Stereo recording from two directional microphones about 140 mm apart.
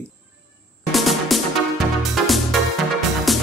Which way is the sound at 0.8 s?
Centre (ahead or behind).